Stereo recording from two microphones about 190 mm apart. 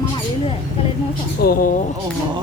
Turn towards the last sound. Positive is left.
turn(degrees=50)  # may be behind; listen again after turning